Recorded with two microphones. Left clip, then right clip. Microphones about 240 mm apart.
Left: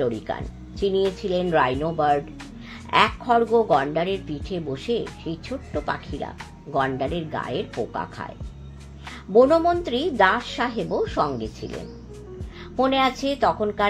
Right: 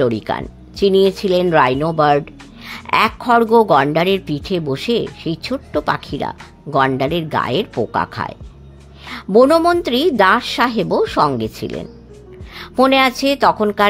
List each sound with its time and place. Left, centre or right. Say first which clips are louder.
0.0 s speech: right 8 dB; right